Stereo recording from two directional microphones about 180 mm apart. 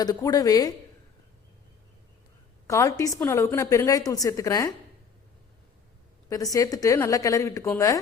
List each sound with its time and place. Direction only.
0.0 s a woman's voice: 20° left (ahead or behind)
2.6 s a woman's voice: 15° left (ahead or behind)
6.2 s a woman's voice: 20° left (ahead or behind)